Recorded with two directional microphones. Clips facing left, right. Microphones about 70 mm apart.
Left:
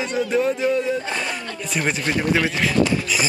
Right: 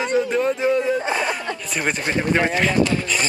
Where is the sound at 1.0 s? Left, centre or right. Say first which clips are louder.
Right 4 dB; centre.